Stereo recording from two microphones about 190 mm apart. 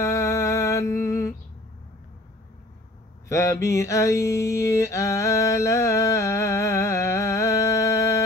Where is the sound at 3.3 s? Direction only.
15° left (ahead or behind).